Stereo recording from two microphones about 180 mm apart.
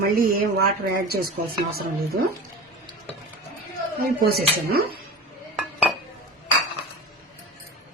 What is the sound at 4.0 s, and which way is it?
Speech, 60° right (ahead or behind).